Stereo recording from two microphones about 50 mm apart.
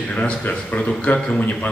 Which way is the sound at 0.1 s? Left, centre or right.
Left.